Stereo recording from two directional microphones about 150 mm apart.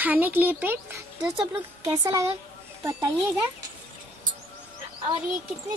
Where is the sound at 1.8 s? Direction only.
25° right (ahead or behind).